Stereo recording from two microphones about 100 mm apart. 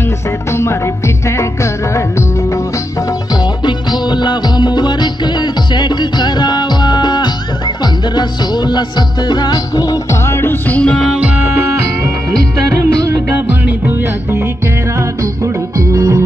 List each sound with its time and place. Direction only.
0.5 s music: 30° left (ahead or behind)
3.6 s music: 50° left (ahead or behind)
10.2 s music: 25° left (ahead or behind)
11.1 s music: 15° right (ahead or behind)
12.8 s music: 20° right (ahead or behind)
15.0 s music: 30° right (ahead or behind)